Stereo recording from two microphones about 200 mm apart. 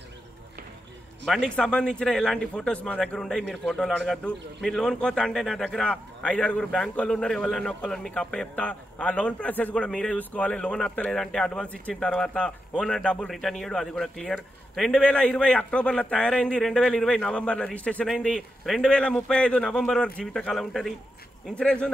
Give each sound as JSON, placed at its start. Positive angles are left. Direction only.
{"t": 1.2, "sound": "a man's voice", "side_deg": 0}